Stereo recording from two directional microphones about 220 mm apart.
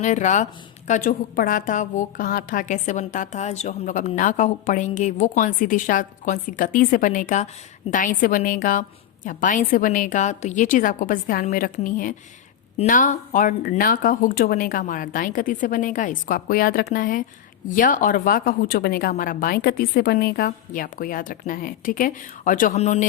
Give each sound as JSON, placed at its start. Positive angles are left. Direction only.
{"t": 0.0, "sound": "a woman's voice", "side_deg": 35}